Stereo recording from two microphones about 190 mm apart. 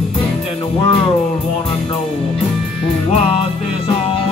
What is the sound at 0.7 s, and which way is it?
Speech, 30° left (ahead or behind).